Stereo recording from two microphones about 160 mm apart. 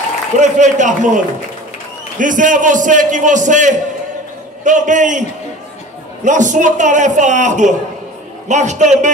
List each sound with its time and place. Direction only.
0.4 s a man's voice: 50° right (ahead or behind)
6.2 s a man's voice: 50° right (ahead or behind)